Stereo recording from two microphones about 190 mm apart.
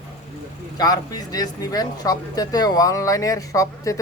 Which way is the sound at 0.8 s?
20° left (ahead or behind).